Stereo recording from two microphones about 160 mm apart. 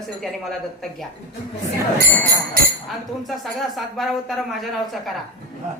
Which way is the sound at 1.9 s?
65° right (ahead or behind).